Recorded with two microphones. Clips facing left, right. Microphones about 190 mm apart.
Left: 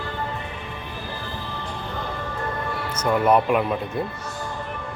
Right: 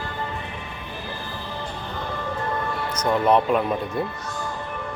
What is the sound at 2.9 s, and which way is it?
Speech, 5° left (ahead or behind).